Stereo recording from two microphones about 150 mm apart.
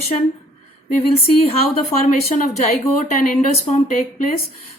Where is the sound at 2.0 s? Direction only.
45° left (ahead or behind).